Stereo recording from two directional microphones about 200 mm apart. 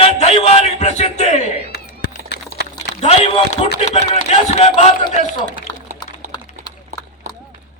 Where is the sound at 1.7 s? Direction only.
55° left (ahead or behind).